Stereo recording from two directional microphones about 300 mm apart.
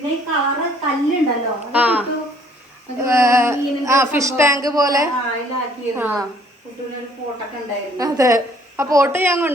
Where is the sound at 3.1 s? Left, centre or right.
Centre.